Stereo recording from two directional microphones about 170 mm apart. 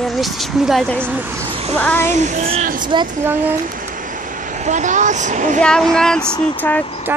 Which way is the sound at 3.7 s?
50° right (ahead or behind).